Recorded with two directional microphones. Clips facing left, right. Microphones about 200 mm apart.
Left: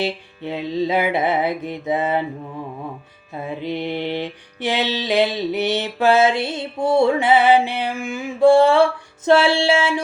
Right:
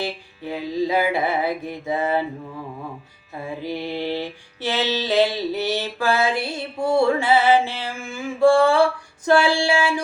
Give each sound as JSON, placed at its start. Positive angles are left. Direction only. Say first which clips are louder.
{"t": 0.0, "sound": "mantra", "louder": "left 4 dB", "side_deg": 25}
{"t": 3.3, "sound": "mantra", "louder": "left 3 dB", "side_deg": 20}